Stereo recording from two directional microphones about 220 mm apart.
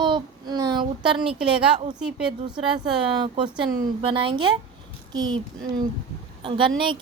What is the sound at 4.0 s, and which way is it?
A woman's voice, 25° right (ahead or behind).